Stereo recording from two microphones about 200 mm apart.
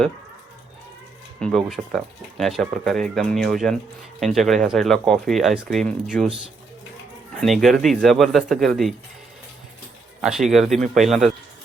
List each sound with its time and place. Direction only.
1.4 s speech: centre (ahead or behind)
7.4 s speech: centre (ahead or behind)
10.2 s speech: centre (ahead or behind)